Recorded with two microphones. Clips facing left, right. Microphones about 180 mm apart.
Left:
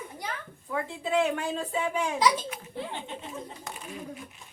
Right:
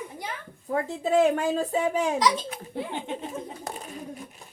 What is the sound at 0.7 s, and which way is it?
A woman's voice, 40° right (ahead or behind).